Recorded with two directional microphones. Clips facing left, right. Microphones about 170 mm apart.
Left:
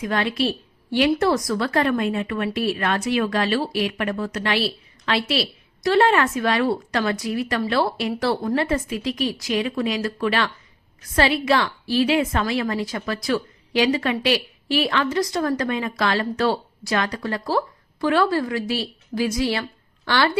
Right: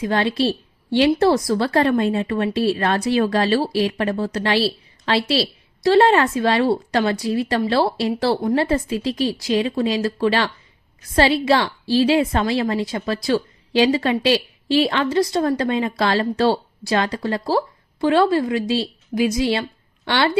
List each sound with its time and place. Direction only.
0.0 s a woman's voice: 30° right (ahead or behind)